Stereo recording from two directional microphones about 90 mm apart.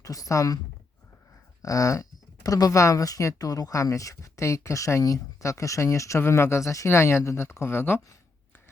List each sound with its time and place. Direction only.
0.0 s speech: 40° left (ahead or behind)
1.6 s speech: 40° left (ahead or behind)